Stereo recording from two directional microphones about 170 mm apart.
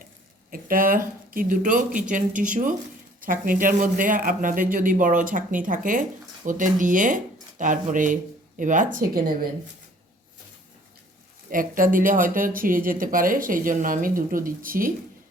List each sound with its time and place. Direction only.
0.5 s a man's voice: 55° right (ahead or behind)
11.4 s a man's voice: 55° right (ahead or behind)